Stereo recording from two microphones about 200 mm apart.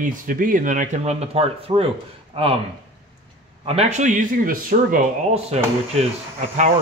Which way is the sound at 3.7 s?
35° right (ahead or behind).